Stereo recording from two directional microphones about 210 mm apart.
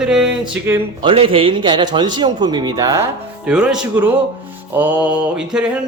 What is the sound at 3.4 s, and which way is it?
Speech, 5° right (ahead or behind).